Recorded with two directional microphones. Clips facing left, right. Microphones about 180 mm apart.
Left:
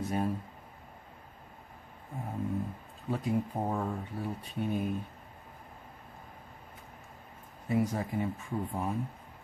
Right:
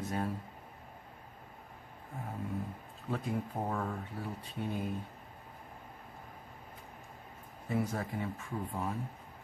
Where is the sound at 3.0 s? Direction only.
15° left (ahead or behind).